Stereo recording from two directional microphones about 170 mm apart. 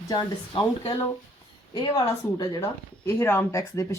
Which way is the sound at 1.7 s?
25° left (ahead or behind).